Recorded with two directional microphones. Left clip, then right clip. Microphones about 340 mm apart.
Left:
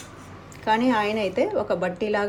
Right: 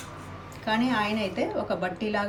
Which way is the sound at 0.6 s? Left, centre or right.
Centre.